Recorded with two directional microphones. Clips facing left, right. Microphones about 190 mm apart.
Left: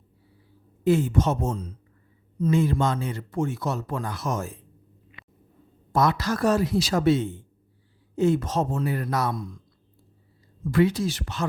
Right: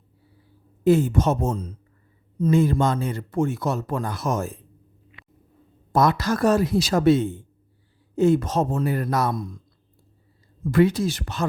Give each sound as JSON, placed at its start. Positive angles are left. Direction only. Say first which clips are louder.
{"t": 0.9, "sound": "speech", "louder": "right 3 dB", "side_deg": -40}
{"t": 5.9, "sound": "speech", "louder": "right 3 dB", "side_deg": -45}
{"t": 10.7, "sound": "speech", "louder": "right 3 dB", "side_deg": -50}